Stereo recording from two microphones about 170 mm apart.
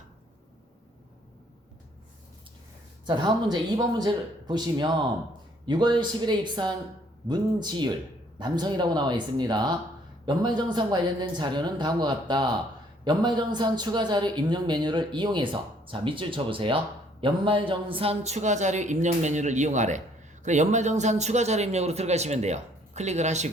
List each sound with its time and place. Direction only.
3.1 s speech: 25° right (ahead or behind); by 23.5 s 40° right (ahead or behind)